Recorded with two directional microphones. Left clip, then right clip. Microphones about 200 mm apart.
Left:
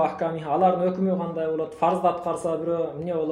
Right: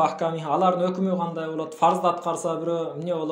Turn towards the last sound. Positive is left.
turn(degrees=-20)  # may be behind; listen again after turning